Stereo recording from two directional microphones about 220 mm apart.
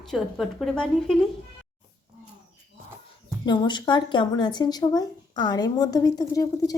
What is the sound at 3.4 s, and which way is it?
A woman's voice, 20° left (ahead or behind).